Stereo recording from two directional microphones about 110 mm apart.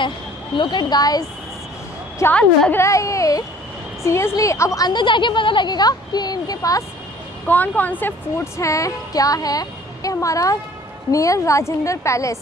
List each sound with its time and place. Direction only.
0.6 s speech: 45° left (ahead or behind)
2.3 s a woman's voice: 10° left (ahead or behind)
2.8 s a woman's voice: 30° left (ahead or behind)
7.4 s a woman's voice: 15° left (ahead or behind)
8.5 s a woman's voice: 30° left (ahead or behind)